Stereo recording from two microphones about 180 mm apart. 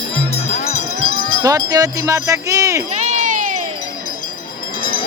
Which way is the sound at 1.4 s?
20° right (ahead or behind).